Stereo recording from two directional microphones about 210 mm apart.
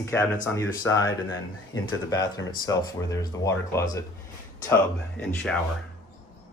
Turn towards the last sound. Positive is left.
turn(degrees=5)  # may be behind; listen again after turning